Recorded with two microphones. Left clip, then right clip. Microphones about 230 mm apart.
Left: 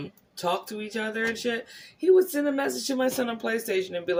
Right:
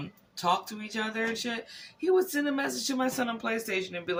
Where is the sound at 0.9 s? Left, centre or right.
Centre.